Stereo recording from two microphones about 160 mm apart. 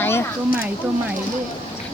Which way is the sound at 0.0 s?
15° left (ahead or behind).